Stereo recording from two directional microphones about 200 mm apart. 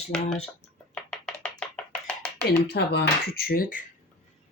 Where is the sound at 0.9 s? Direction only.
5° left (ahead or behind).